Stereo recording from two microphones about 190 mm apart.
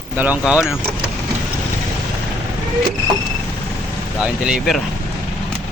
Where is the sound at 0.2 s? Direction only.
5° right (ahead or behind).